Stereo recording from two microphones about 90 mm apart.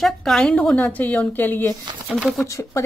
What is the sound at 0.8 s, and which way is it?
Speech, 20° left (ahead or behind).